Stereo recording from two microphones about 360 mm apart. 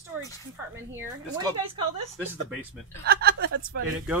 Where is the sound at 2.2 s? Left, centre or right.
Centre.